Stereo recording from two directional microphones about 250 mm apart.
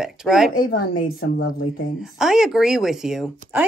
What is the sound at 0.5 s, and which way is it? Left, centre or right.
Speech, left.